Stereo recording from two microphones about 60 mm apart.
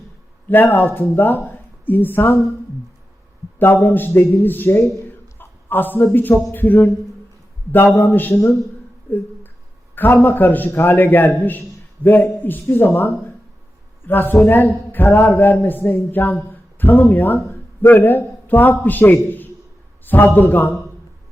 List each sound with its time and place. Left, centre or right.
0.6 s a woman's voice: left
3.6 s a man's voice: left
9.0 s a sound: left
9.9 s a man's voice: left
14.1 s a woman's voice: left